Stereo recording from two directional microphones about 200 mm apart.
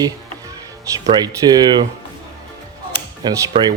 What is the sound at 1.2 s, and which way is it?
Speech, 20° right (ahead or behind).